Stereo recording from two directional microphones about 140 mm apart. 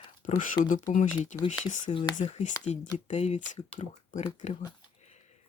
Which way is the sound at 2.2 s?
55° left (ahead or behind).